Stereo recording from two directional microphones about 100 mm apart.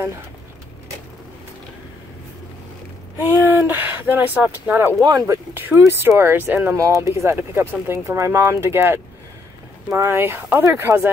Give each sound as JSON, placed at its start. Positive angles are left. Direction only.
{"t": 3.3, "sound": "speech", "side_deg": -20}
{"t": 5.0, "sound": "speech", "side_deg": -35}
{"t": 5.5, "sound": "speech", "side_deg": -20}